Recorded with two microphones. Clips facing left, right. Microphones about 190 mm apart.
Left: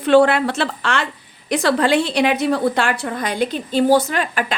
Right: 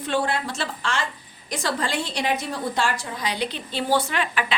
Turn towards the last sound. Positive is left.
turn(degrees=45)  # may be behind; listen again after turning